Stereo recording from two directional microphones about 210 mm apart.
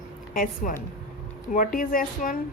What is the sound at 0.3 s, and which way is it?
A woman's voice, 40° left (ahead or behind).